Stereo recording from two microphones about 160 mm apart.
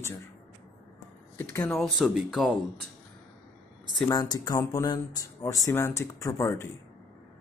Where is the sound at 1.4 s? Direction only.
15° left (ahead or behind).